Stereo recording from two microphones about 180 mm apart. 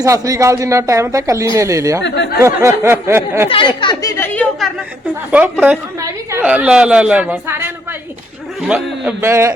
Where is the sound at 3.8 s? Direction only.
25° left (ahead or behind).